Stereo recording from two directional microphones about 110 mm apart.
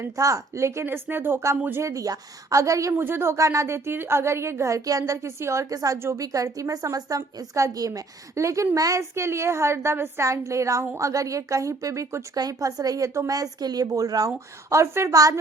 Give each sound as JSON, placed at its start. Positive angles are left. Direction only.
{"t": 0.0, "sound": "speech", "side_deg": -30}